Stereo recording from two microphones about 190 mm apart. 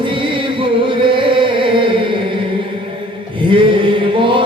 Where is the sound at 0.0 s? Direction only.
25° right (ahead or behind).